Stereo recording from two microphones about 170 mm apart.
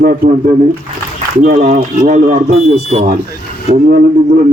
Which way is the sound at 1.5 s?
45° right (ahead or behind).